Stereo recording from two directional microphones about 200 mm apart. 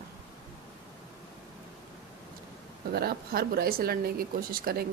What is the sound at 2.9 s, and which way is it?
Speech, 50° right (ahead or behind).